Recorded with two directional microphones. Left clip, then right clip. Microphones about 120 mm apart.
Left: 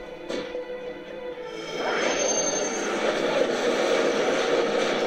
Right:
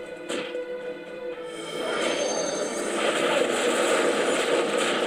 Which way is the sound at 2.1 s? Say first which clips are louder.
Left 2 dB; 20° right (ahead or behind).